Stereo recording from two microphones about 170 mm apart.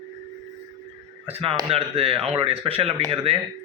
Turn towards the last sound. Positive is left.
turn(degrees=-35)  # may be behind; listen again after turning